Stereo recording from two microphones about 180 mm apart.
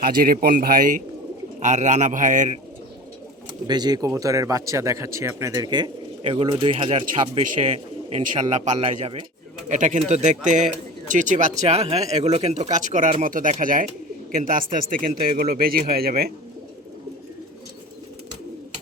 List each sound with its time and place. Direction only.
0.0 s speech: 55° right (ahead or behind)
3.7 s speech: 25° right (ahead or behind)
9.6 s speech: 45° right (ahead or behind)